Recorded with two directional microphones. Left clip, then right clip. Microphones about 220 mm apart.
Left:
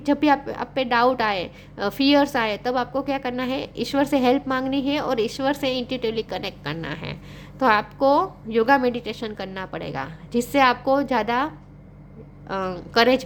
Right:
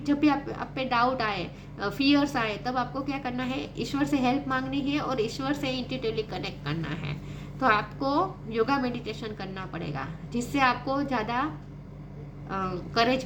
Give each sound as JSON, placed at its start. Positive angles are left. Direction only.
{"t": 0.0, "sound": "a woman's voice", "side_deg": 45}
{"t": 12.5, "sound": "a woman's voice", "side_deg": 45}